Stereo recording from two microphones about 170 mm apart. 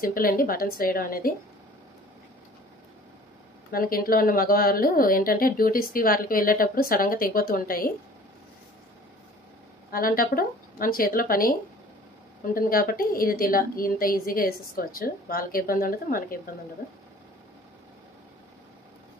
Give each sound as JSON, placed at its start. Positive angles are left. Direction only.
{"t": 0.0, "sound": "speech", "side_deg": 60}
{"t": 3.7, "sound": "speech", "side_deg": 60}
{"t": 9.8, "sound": "speech", "side_deg": 55}
{"t": 12.5, "sound": "speech", "side_deg": 55}